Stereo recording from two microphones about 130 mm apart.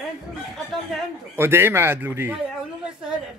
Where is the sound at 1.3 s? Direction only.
20° right (ahead or behind).